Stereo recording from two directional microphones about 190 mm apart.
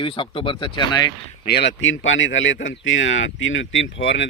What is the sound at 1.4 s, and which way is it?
Speech, 60° left (ahead or behind).